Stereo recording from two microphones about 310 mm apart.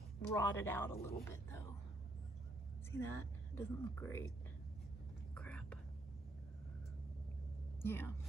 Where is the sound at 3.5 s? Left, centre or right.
Centre.